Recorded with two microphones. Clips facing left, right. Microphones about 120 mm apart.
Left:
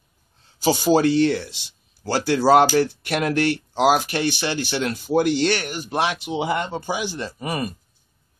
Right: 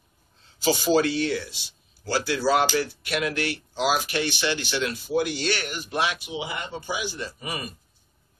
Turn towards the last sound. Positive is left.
turn(degrees=45)  # may be behind; listen again after turning